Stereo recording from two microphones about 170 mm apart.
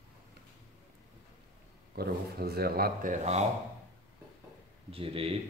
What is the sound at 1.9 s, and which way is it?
Speech, 65° right (ahead or behind).